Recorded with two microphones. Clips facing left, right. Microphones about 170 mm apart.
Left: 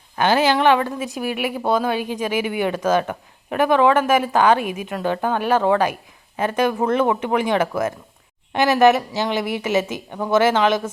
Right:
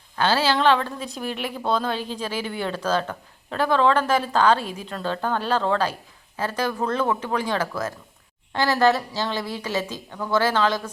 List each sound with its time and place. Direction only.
0.2 s a woman's voice: 15° left (ahead or behind)